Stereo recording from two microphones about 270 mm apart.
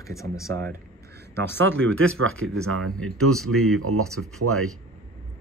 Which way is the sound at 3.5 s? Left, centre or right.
Right.